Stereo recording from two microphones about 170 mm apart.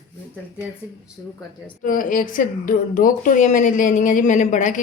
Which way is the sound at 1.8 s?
50° left (ahead or behind).